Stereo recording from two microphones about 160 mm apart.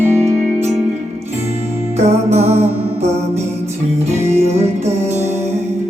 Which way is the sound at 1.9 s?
45° right (ahead or behind).